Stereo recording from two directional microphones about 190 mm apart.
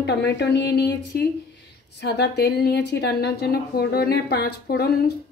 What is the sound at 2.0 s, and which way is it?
A woman's voice, 60° left (ahead or behind).